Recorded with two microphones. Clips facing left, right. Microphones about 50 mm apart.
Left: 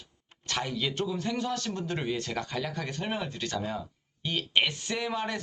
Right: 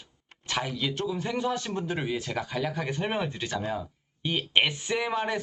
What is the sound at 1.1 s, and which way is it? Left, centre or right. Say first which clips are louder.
Speech: right 2 dB; centre.